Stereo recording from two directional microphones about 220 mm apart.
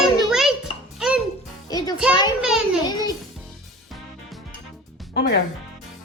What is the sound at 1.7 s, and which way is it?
Music, 15° left (ahead or behind).